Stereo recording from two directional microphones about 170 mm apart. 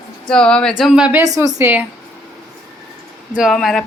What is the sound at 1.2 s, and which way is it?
Speech, 20° right (ahead or behind).